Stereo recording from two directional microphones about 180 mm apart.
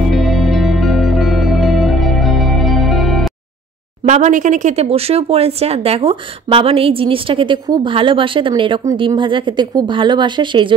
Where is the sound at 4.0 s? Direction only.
40° right (ahead or behind).